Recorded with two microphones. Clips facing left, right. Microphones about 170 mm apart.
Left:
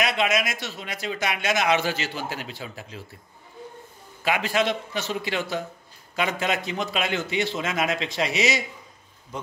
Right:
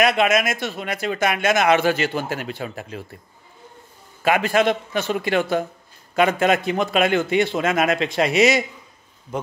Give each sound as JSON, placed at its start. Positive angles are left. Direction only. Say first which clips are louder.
{"t": 0.0, "sound": "speech", "louder": "right 6 dB", "side_deg": -50}
{"t": 4.2, "sound": "a man's voice", "louder": "right 6 dB", "side_deg": -50}